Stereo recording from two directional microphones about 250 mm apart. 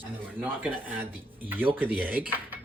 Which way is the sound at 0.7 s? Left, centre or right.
Centre.